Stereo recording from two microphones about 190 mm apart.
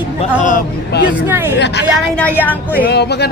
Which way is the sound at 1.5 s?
65° left (ahead or behind).